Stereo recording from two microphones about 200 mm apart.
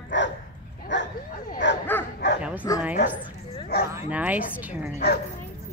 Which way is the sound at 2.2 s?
60° left (ahead or behind).